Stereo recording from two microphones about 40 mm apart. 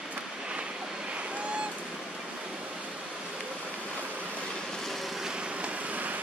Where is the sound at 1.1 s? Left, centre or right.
Right.